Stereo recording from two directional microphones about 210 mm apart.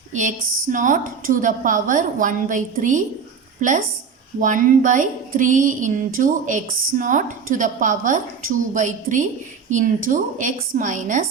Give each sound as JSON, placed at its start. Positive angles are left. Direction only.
{"t": 0.1, "sound": "speech", "side_deg": -35}